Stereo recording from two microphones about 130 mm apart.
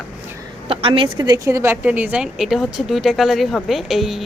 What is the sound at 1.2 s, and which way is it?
A woman's voice, 25° right (ahead or behind).